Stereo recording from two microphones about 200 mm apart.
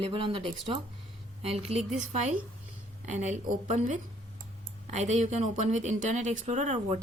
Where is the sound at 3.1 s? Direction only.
35° right (ahead or behind).